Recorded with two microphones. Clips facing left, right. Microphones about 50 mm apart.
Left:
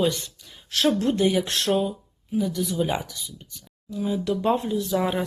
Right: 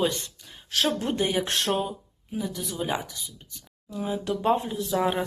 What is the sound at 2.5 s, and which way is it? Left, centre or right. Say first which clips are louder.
Speech: left 5 dB; centre.